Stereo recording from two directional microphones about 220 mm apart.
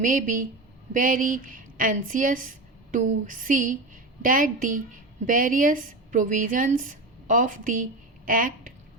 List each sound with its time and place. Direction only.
0.0 s a woman's voice: 35° right (ahead or behind)